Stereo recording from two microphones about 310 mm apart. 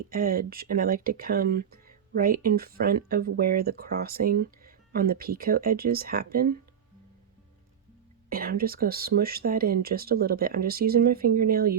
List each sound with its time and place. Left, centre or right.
0.1 s speech: right
8.3 s speech: right